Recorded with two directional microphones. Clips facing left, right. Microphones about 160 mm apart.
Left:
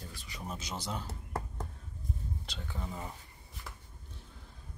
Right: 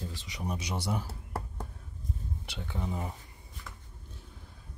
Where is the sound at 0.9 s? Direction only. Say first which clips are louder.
Right 4 dB; 10° right (ahead or behind).